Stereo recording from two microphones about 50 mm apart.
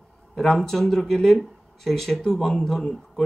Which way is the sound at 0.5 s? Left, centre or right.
Centre.